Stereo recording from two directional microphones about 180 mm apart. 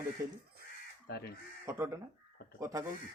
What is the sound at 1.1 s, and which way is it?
Speech, 60° left (ahead or behind).